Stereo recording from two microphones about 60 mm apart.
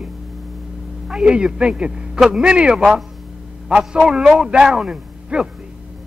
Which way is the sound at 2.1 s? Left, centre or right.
Centre.